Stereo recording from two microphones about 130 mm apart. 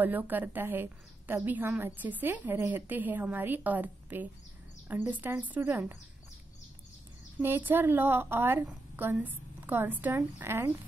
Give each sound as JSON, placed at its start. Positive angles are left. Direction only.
{"t": 0.0, "sound": "a woman's voice", "side_deg": -15}
{"t": 7.4, "sound": "a woman's voice", "side_deg": -15}